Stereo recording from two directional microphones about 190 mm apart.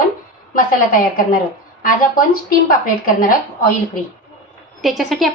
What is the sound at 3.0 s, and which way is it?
Speech, 50° left (ahead or behind).